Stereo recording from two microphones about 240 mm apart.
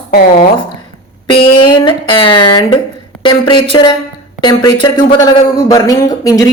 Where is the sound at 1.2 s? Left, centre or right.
Left.